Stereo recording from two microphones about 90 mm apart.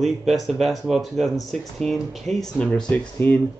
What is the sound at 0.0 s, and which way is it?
Speech, centre (ahead or behind).